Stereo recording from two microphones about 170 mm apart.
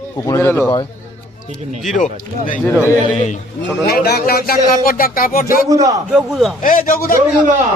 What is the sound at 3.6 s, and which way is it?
A man's voice, 70° left (ahead or behind).